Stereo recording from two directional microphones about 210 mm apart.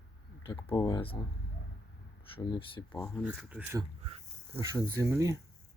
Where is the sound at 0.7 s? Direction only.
15° left (ahead or behind).